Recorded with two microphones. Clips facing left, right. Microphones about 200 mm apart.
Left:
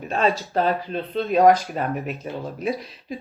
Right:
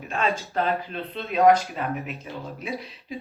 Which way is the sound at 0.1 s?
35° left (ahead or behind).